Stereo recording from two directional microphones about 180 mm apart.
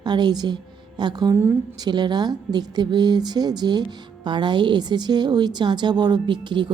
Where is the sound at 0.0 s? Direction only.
25° right (ahead or behind).